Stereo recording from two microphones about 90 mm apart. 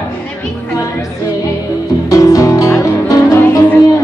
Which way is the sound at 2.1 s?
40° left (ahead or behind).